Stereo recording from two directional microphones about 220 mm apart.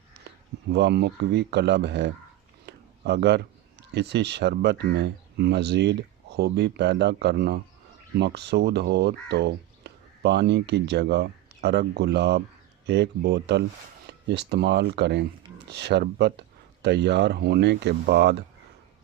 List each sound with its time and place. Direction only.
0.3 s speech: 50° right (ahead or behind)